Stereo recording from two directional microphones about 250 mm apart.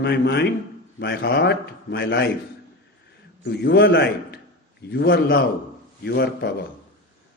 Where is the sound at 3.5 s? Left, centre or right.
Left.